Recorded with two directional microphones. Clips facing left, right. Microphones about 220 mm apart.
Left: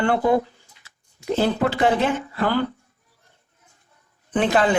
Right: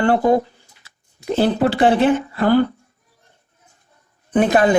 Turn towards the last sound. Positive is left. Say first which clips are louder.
# right 5 dB
turn(degrees=-40)  # may be behind; listen again after turning